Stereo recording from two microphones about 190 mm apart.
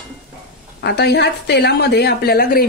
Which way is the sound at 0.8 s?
60° left (ahead or behind).